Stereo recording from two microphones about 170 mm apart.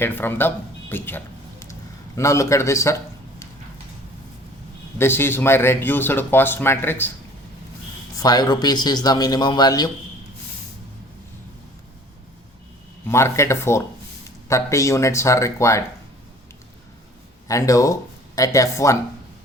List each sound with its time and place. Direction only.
0.0 s a man's voice: 10° left (ahead or behind)
4.9 s speech: 15° left (ahead or behind)
8.1 s a man's voice: 20° left (ahead or behind)
13.1 s speech: 15° left (ahead or behind)
17.5 s a man's voice: 20° left (ahead or behind)